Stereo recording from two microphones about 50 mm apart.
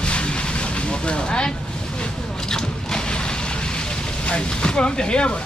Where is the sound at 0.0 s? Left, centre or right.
Left.